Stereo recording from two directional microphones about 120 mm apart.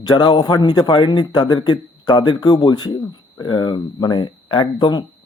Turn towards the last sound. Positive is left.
turn(degrees=40)  # may be behind; listen again after turning